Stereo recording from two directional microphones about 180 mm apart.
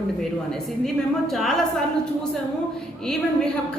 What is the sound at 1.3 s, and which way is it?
Speech, centre (ahead or behind).